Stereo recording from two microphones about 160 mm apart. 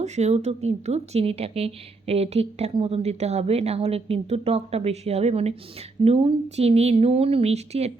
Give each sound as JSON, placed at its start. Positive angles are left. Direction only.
{"t": 0.0, "sound": "speech", "side_deg": -45}